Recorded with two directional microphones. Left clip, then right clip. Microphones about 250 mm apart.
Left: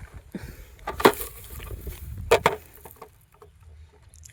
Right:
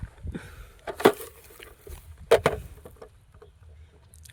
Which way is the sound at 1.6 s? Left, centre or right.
Centre.